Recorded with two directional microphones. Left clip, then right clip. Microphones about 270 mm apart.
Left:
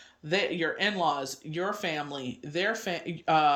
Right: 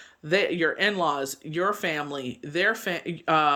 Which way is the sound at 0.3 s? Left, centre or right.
Centre.